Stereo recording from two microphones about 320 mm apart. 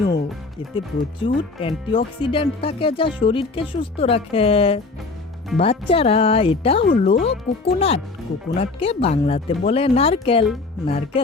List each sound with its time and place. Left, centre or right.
0.6 s speech: centre